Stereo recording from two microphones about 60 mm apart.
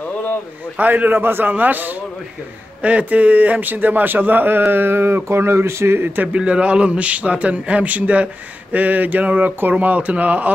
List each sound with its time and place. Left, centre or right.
0.7 s a man's voice: right
6.2 s a man's voice: centre